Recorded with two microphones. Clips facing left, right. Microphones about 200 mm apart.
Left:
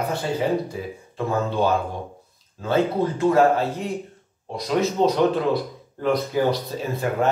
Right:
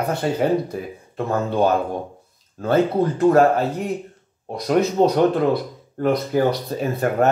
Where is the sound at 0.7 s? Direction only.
55° right (ahead or behind).